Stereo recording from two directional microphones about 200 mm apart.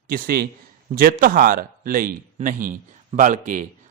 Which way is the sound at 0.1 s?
50° right (ahead or behind).